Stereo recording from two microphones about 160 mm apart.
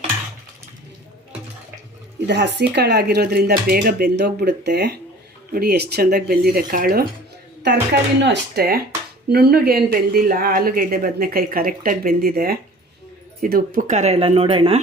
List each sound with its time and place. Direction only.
2.2 s speech: 90° right
5.5 s speech: 80° right
7.6 s speech: 90° right; by 14.8 s 35° right (ahead or behind)